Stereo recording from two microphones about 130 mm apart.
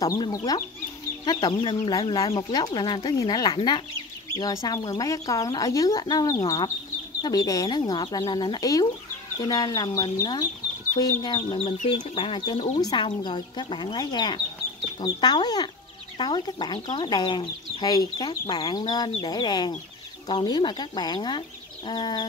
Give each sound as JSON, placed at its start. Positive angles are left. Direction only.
{"t": 0.0, "sound": "speech", "side_deg": 30}
{"t": 11.3, "sound": "speech", "side_deg": 45}